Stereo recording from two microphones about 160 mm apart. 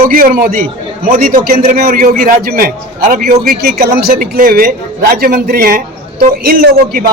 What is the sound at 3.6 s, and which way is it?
A man's voice, 80° right.